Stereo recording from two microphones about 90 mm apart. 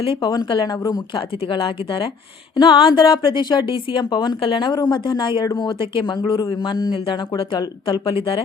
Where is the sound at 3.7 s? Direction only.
65° left (ahead or behind).